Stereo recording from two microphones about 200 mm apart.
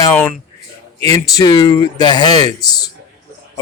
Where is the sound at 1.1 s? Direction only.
15° left (ahead or behind).